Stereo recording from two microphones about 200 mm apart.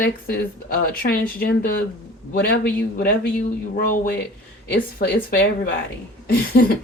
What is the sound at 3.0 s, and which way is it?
Speech, 50° left (ahead or behind).